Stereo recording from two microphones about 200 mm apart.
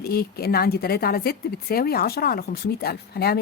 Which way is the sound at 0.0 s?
50° left (ahead or behind).